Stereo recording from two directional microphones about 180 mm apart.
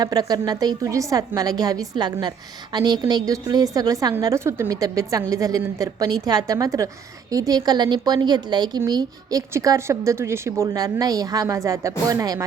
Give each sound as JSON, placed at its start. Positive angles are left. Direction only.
{"t": 0.0, "sound": "a woman's voice", "side_deg": -20}